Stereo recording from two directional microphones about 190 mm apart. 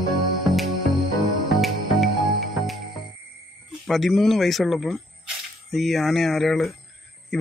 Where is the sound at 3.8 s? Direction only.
Centre (ahead or behind).